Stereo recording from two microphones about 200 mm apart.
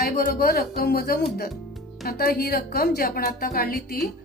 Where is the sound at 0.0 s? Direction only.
50° left (ahead or behind).